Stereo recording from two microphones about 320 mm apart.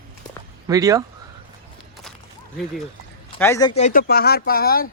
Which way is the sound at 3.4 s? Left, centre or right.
Centre.